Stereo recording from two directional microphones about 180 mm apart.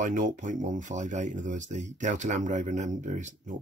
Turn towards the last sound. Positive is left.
turn(degrees=-45)  # may be behind; listen again after turning